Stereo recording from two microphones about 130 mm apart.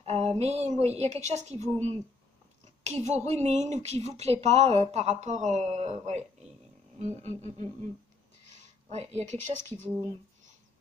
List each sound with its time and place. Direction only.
0.0 s a woman's voice: 55° right (ahead or behind)